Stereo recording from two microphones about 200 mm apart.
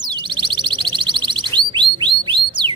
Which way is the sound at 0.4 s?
25° right (ahead or behind).